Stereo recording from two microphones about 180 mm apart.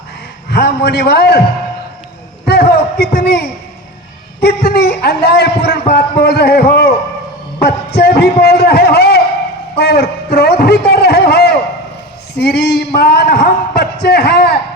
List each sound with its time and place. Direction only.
0.5 s a man's voice: 60° left (ahead or behind)
2.5 s a man's voice: 60° left (ahead or behind)
7.6 s a sound: 60° left (ahead or behind)